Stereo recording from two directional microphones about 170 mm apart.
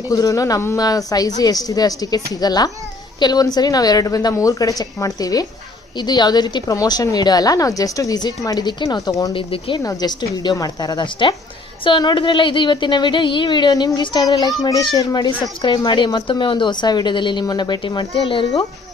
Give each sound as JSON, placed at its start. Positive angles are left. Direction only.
{"t": 0.1, "sound": "a woman's voice", "side_deg": 20}